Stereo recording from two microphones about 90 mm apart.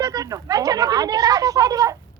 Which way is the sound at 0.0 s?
40° right (ahead or behind).